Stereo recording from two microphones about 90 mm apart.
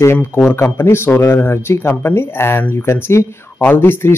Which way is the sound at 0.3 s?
30° left (ahead or behind).